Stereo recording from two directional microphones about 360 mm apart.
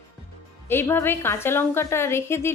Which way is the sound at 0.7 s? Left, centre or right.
Centre.